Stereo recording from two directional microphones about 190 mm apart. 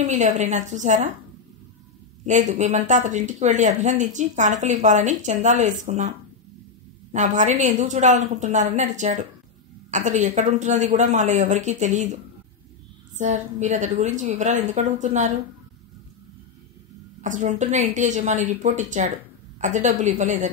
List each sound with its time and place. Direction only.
0.0 s speech: 35° right (ahead or behind)
2.2 s speech: 40° right (ahead or behind)
17.2 s speech: 40° right (ahead or behind)